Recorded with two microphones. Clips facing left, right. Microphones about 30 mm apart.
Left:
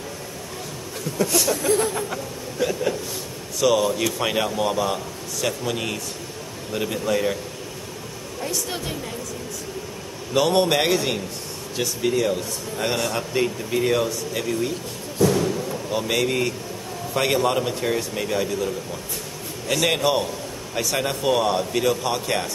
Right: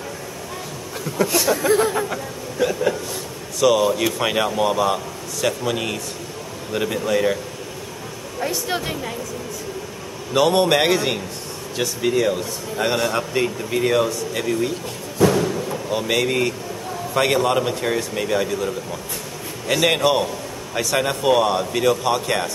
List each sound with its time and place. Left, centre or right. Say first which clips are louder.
1.1 s speech: right 3 dB; centre
8.4 s speech: right 5 dB; right
10.3 s speech: right 3 dB; centre
15.3 s a sound: right 2 dB; centre
17.1 s speech: right 3 dB; centre